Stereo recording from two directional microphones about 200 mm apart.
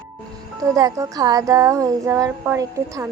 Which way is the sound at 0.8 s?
20° right (ahead or behind).